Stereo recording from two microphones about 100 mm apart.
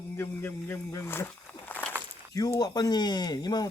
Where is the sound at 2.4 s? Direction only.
35° left (ahead or behind).